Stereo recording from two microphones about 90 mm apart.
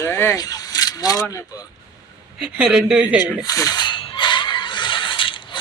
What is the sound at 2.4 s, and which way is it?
Speech, 10° right (ahead or behind).